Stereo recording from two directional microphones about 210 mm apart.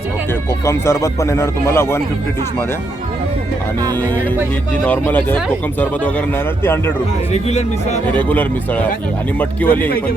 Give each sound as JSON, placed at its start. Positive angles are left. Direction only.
{"t": 0.6, "sound": "speech", "side_deg": 15}
{"t": 4.9, "sound": "speech", "side_deg": 10}
{"t": 7.3, "sound": "speech", "side_deg": 30}
{"t": 8.1, "sound": "speech", "side_deg": 10}